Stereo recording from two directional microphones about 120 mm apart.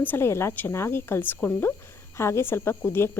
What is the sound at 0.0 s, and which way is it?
Speech, 20° left (ahead or behind).